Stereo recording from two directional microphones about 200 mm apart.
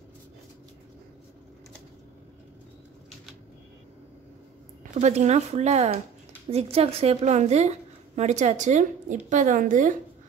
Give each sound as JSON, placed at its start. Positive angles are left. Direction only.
{"t": 4.9, "sound": "a woman's voice", "side_deg": -35}